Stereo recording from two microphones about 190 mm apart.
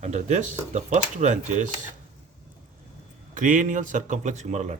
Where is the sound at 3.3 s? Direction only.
45° right (ahead or behind).